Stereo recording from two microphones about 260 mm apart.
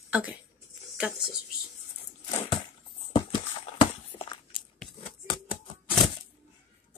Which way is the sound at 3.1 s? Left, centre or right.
Centre.